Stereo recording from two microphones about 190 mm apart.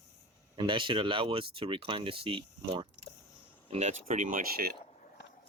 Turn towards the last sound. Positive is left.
turn(degrees=-50)  # may be behind; listen again after turning